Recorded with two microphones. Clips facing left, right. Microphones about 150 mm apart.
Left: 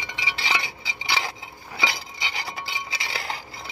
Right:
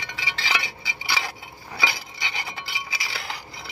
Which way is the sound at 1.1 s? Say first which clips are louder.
Left 2 dB; 20° left (ahead or behind).